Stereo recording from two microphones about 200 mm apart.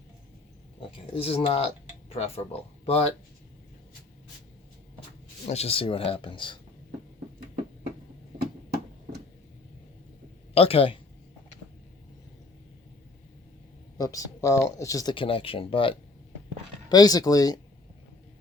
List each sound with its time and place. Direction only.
1.1 s speech: 30° left (ahead or behind)
5.5 s speech: 30° left (ahead or behind)
10.5 s speech: 30° left (ahead or behind)
14.0 s speech: 15° left (ahead or behind)